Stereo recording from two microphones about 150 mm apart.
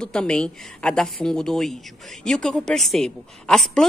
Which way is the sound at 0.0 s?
5° left (ahead or behind).